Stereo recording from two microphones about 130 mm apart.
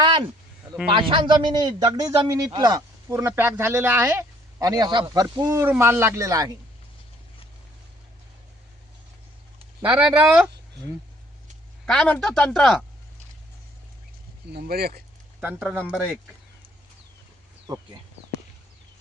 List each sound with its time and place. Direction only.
0.0 s a sound: 35° right (ahead or behind)
0.9 s a man's voice: 40° right (ahead or behind); by 4.3 s 15° right (ahead or behind)
4.6 s a man's voice: 30° right (ahead or behind)
9.8 s speech: 10° right (ahead or behind)
11.9 s speech: 5° left (ahead or behind)
15.4 s speech: 15° right (ahead or behind)